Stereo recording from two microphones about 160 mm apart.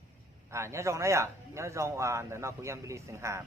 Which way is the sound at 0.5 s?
15° right (ahead or behind).